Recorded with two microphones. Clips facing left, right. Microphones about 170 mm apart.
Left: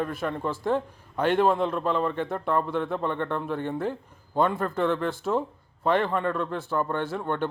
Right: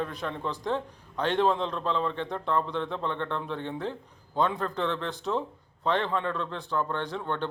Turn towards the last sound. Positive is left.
turn(degrees=10)  # may be behind; listen again after turning